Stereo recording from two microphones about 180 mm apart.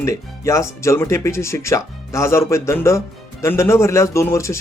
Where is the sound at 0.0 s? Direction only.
15° left (ahead or behind).